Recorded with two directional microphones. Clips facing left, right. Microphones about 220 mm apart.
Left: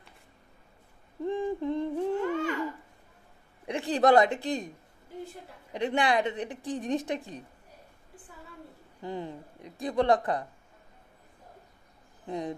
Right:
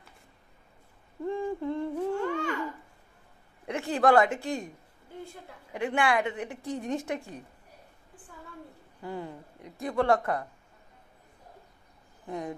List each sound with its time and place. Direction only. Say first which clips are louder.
1.2 s a sound: left 1 dB; 20° left (ahead or behind)
2.2 s babbling: left 1 dB; 5° left (ahead or behind)
3.6 s a woman's voice: left 1 dB; 15° left (ahead or behind)
9.0 s a woman's voice: left 1 dB; 20° left (ahead or behind)
12.3 s speech: left 2 dB; 15° left (ahead or behind)